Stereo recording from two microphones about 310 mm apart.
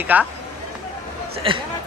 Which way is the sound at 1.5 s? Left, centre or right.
Centre.